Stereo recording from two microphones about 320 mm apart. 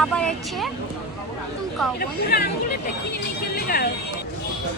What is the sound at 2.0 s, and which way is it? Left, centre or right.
Speech, left.